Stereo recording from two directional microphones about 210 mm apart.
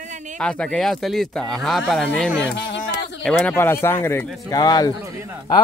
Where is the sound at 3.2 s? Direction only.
5° left (ahead or behind).